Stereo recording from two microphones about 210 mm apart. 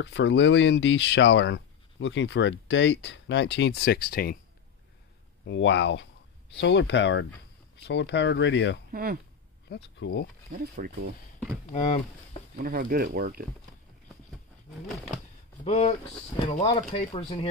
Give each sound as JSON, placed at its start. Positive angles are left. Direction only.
{"t": 0.0, "sound": "speech", "side_deg": 60}
{"t": 5.5, "sound": "speech", "side_deg": 55}
{"t": 8.9, "sound": "speech", "side_deg": -45}
{"t": 9.9, "sound": "speech", "side_deg": 55}
{"t": 10.5, "sound": "speech", "side_deg": -45}
{"t": 11.7, "sound": "speech", "side_deg": 30}
{"t": 12.5, "sound": "speech", "side_deg": -45}
{"t": 15.6, "sound": "speech", "side_deg": 30}